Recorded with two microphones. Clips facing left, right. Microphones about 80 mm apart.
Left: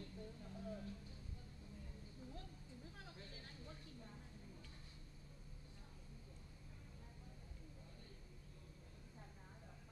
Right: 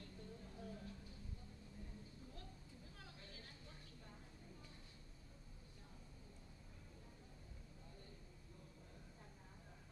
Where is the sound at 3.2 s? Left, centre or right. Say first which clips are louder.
Left 2 dB; left.